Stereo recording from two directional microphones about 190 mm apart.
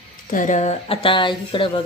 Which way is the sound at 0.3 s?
45° left (ahead or behind).